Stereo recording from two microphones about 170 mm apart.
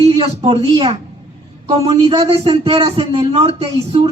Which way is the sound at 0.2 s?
35° right (ahead or behind).